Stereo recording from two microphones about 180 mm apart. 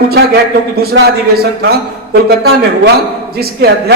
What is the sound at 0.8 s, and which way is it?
A man's voice, 60° right (ahead or behind).